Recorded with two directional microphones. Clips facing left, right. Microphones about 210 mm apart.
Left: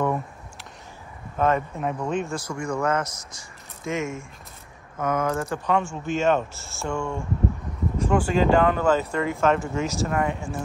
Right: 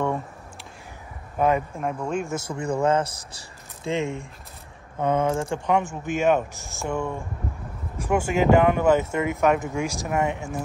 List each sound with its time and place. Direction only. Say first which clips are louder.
1.3 s speech: right 1 dB; 10° right (ahead or behind)
2.2 s speech: right 1 dB; 20° right (ahead or behind)
5.8 s speech: even; 15° right (ahead or behind)